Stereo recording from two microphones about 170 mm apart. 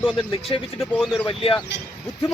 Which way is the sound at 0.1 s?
30° left (ahead or behind).